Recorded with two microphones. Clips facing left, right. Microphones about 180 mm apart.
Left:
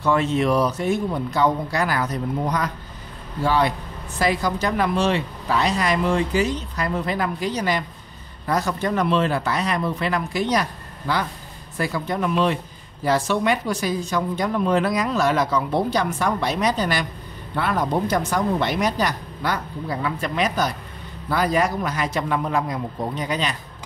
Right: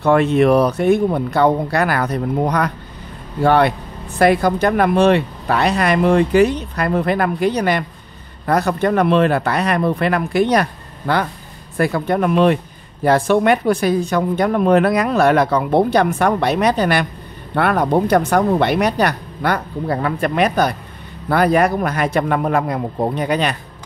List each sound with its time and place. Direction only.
0.0 s speech: 60° right (ahead or behind)